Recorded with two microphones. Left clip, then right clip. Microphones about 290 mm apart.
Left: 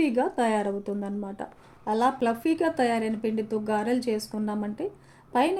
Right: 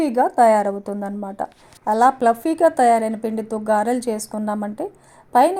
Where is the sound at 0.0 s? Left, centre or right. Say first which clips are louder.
Right 10 dB; right.